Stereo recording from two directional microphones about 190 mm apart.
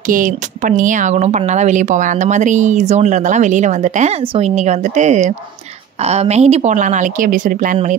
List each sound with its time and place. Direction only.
0.1 s speech: 45° right (ahead or behind)